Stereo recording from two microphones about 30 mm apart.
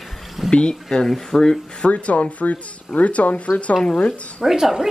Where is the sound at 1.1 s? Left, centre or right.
Centre.